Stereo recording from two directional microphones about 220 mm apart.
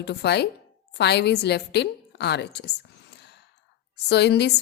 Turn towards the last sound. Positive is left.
turn(degrees=50)  # may be behind; listen again after turning